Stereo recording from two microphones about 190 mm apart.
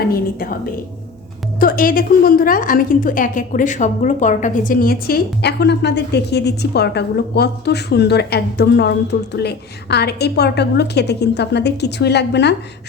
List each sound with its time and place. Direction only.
1.5 s a woman's voice: 50° left (ahead or behind)